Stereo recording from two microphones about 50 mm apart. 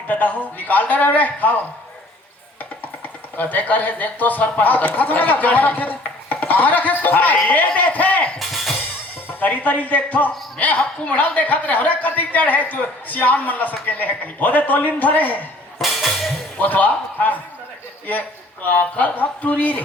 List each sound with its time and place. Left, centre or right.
0.1 s a man's voice: left
3.3 s a man's voice: left
8.4 s music: centre
9.4 s a man's voice: left
15.8 s music: centre
16.6 s a man's voice: left
18.6 s a man's voice: left